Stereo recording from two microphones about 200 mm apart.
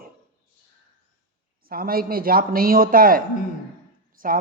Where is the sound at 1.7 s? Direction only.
50° right (ahead or behind).